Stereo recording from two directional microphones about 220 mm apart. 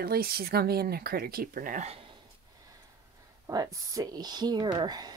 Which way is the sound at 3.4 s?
15° right (ahead or behind).